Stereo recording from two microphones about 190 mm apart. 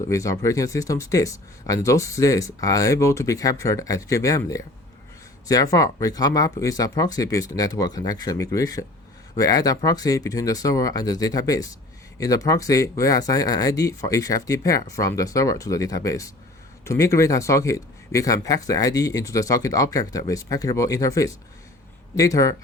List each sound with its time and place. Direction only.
0.1 s speech: 15° left (ahead or behind)